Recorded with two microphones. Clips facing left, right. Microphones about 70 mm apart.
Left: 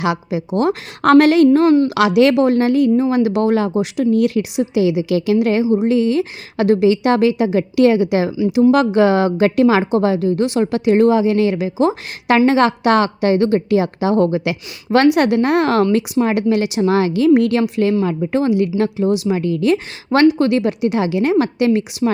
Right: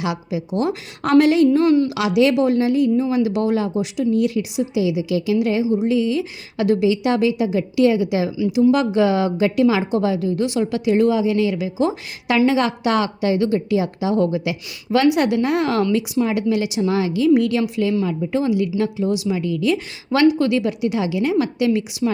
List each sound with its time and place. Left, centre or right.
0.0 s speech: left
1.5 s a woman's voice: left
2.0 s a woman's voice: left